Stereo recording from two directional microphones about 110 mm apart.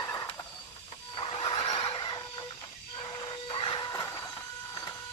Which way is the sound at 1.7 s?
55° left (ahead or behind).